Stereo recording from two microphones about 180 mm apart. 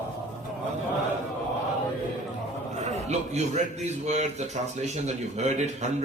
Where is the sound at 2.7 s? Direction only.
40° right (ahead or behind).